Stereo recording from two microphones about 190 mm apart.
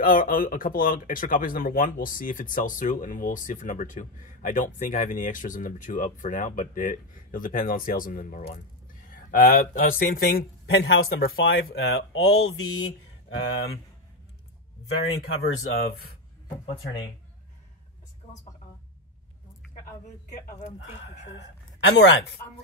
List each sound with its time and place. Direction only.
0.0 s speech: 45° left (ahead or behind); by 11.1 s 70° left (ahead or behind)
11.3 s speech: 90° left
15.4 s speech: 60° left (ahead or behind)
20.2 s speech: 40° left (ahead or behind)
20.8 s speech: 90° left
21.3 s speech: 70° left (ahead or behind)